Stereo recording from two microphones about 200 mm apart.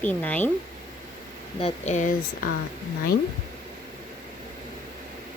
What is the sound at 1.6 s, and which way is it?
Speech, 35° left (ahead or behind).